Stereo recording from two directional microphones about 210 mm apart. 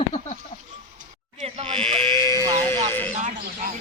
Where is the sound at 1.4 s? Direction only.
30° right (ahead or behind).